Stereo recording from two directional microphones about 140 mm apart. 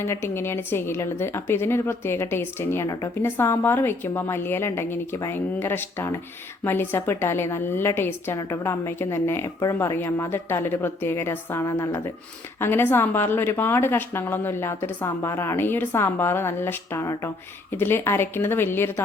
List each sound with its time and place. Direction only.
0.0 s a woman's voice: 15° left (ahead or behind)